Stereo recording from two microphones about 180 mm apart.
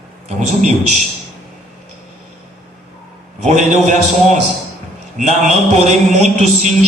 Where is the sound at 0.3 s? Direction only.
40° right (ahead or behind).